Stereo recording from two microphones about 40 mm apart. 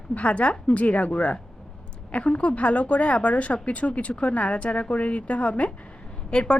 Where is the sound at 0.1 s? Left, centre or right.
Left.